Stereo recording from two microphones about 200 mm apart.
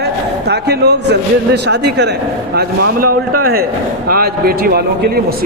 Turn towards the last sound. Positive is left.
turn(degrees=-50)  # may be behind; listen again after turning